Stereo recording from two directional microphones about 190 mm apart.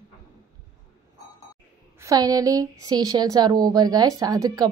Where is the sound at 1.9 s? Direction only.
15° right (ahead or behind).